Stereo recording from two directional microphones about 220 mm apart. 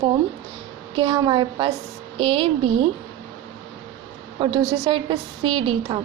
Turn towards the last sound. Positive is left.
turn(degrees=-25)  # may be behind; listen again after turning